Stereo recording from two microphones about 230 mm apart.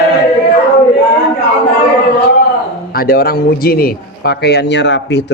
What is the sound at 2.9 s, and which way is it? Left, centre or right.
A man's voice, left.